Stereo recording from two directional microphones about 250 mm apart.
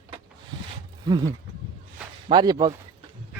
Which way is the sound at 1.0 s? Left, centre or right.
Centre.